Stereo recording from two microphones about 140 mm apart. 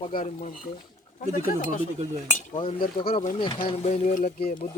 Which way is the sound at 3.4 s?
35° left (ahead or behind).